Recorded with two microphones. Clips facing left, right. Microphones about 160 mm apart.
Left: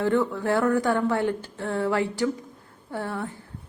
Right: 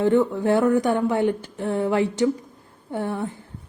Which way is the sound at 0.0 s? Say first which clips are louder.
Right 4 dB; 20° right (ahead or behind).